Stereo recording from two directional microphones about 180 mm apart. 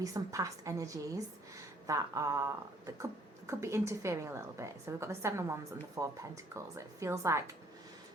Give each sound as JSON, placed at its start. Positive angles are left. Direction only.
{"t": 0.0, "sound": "a woman's voice", "side_deg": -20}